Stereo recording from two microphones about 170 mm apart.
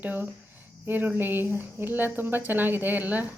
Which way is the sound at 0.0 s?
10° right (ahead or behind).